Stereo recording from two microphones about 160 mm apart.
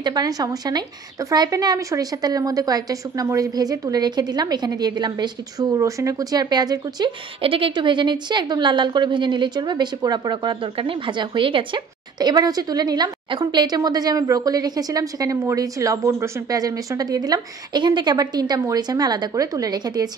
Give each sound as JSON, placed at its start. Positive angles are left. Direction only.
{"t": 0.0, "sound": "a woman's voice", "side_deg": -25}